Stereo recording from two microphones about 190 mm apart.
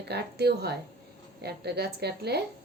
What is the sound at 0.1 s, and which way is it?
Speech, 60° right (ahead or behind).